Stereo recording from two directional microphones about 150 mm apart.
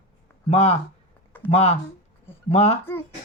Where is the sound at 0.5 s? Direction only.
40° left (ahead or behind).